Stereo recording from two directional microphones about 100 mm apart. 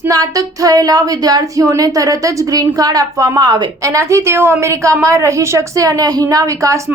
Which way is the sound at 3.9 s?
30° right (ahead or behind).